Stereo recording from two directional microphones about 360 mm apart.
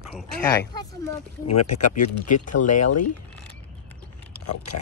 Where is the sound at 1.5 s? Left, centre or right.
Left.